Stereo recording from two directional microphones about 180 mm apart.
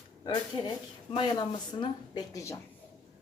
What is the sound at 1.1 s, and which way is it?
A woman's voice, 30° left (ahead or behind).